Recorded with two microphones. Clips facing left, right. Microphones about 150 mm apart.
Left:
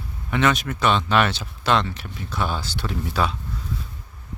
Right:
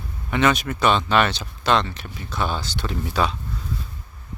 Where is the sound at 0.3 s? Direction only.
Centre (ahead or behind).